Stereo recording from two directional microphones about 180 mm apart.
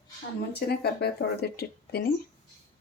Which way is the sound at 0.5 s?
65° left (ahead or behind).